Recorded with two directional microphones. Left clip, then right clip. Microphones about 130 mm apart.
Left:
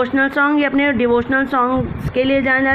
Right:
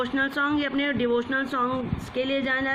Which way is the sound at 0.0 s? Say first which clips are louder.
Left 9 dB; 35° left (ahead or behind).